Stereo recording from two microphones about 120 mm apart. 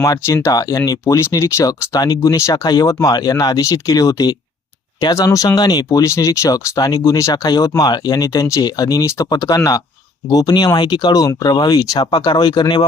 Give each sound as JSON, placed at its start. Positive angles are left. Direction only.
{"t": 0.0, "sound": "speech", "side_deg": 25}